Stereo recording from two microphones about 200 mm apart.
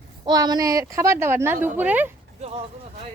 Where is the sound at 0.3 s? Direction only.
20° right (ahead or behind).